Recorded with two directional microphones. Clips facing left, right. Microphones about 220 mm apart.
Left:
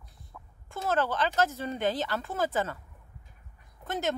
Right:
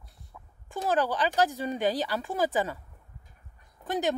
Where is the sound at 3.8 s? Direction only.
15° right (ahead or behind).